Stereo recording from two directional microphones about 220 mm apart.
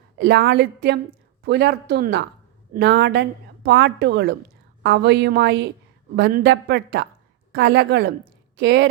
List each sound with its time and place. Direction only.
0.2 s a woman's voice: 50° right (ahead or behind)